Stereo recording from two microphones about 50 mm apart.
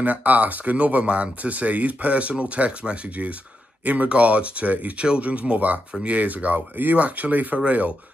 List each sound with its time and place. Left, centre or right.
0.0 s speech: right